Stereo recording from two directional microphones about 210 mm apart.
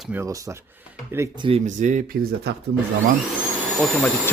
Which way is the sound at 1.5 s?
35° right (ahead or behind).